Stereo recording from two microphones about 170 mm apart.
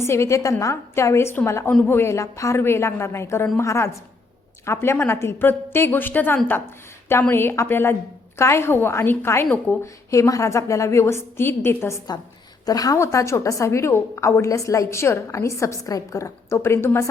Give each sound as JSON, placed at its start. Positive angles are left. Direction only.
{"t": 0.0, "sound": "a woman's voice", "side_deg": 15}